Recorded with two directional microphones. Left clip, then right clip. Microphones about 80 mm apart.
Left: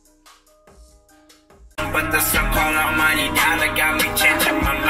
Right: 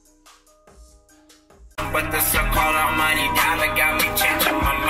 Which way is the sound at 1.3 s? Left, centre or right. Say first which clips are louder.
Left 1 dB; left.